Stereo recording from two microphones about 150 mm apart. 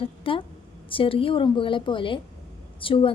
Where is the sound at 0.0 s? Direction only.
35° left (ahead or behind).